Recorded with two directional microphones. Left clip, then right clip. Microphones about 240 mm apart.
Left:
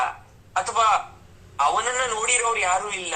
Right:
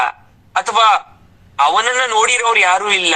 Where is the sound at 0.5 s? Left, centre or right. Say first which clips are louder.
Right 8 dB; right.